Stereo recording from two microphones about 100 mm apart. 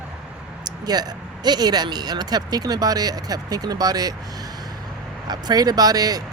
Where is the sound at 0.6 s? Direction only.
45° right (ahead or behind).